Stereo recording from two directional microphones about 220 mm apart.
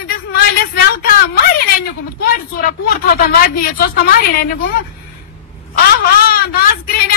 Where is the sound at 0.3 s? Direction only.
40° left (ahead or behind).